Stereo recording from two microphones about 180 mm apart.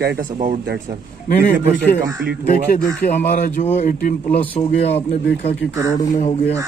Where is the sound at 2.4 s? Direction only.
50° left (ahead or behind); by 5.0 s 35° left (ahead or behind).